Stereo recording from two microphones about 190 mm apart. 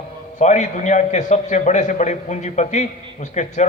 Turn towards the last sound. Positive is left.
turn(degrees=40)  # may be behind; listen again after turning